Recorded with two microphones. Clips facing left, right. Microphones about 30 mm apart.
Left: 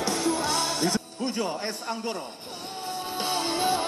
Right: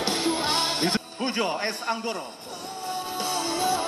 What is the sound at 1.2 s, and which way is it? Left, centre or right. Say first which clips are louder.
A man's voice: right 4 dB; right.